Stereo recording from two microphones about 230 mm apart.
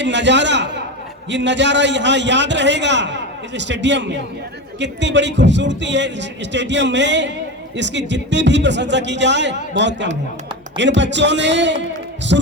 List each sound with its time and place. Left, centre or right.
0.0 s a man's voice: right